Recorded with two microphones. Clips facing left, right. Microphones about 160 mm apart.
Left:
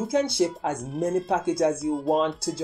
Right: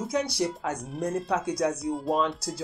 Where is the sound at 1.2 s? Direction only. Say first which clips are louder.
Left 4 dB; 25° left (ahead or behind).